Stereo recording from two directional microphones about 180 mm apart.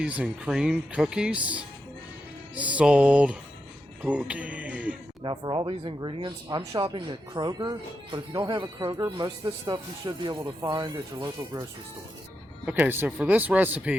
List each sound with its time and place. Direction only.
0.0 s speech: 5° right (ahead or behind)
5.2 s speech: 25° right (ahead or behind)
12.6 s speech: 10° right (ahead or behind)